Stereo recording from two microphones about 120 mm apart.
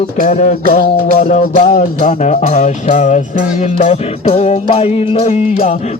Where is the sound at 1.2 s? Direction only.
65° left (ahead or behind); by 3.2 s 90° left.